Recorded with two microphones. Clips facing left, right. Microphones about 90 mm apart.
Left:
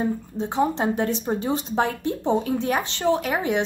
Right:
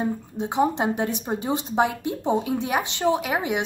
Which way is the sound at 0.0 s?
15° right (ahead or behind).